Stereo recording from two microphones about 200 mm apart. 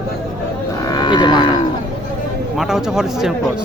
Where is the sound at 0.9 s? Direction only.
20° left (ahead or behind).